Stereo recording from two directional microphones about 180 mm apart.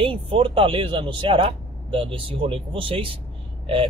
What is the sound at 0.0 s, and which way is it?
Speech, 30° right (ahead or behind).